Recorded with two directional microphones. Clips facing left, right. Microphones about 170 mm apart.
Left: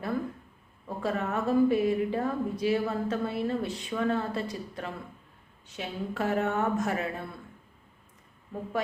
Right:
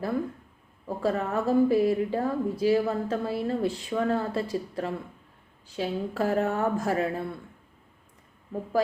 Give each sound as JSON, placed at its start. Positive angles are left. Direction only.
{"t": 0.9, "sound": "a woman's voice", "side_deg": -30}